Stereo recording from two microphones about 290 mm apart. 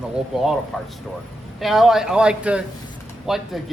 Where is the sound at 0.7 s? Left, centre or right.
Centre.